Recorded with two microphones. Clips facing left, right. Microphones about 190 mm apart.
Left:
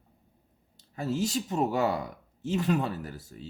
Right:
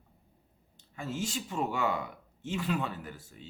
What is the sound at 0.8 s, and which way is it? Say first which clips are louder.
Speech: left 6 dB; 40° left (ahead or behind).